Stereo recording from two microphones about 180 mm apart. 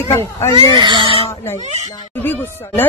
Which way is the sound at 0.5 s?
25° right (ahead or behind).